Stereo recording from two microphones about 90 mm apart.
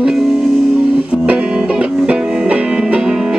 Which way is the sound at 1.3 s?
15° right (ahead or behind).